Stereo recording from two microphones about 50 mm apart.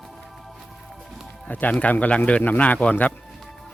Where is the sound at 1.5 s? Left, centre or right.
Left.